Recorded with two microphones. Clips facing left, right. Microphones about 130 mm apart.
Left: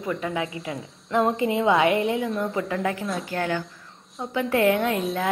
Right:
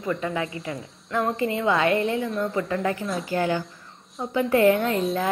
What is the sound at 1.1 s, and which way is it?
A woman's voice, 20° left (ahead or behind).